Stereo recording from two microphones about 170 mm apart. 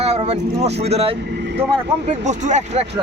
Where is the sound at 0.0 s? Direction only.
35° right (ahead or behind).